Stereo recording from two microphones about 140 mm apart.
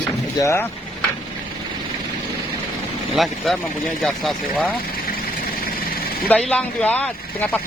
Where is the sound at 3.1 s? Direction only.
Centre (ahead or behind).